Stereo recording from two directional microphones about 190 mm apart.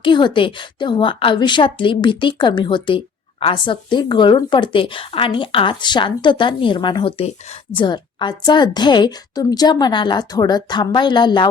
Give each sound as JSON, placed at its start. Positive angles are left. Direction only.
{"t": 0.0, "sound": "a woman's voice", "side_deg": 25}